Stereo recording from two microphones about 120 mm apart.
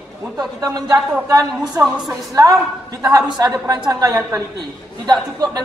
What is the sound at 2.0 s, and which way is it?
A man's voice, 30° right (ahead or behind).